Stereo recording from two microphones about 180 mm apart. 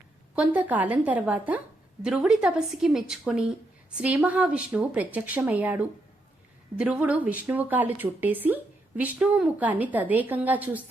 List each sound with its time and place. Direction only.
0.3 s a woman's voice: 10° right (ahead or behind)